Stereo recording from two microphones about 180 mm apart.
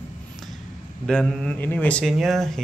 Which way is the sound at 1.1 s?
5° left (ahead or behind).